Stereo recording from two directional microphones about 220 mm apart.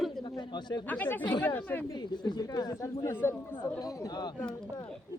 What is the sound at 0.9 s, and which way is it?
Speech, 10° left (ahead or behind).